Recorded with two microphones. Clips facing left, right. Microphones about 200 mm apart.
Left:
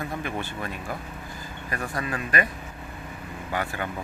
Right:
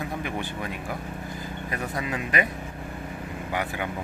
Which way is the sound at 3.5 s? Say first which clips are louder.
Even; 15° right (ahead or behind).